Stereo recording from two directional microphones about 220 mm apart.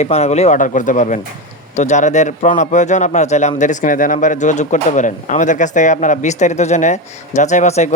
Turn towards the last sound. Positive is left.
turn(degrees=30)  # may be behind; listen again after turning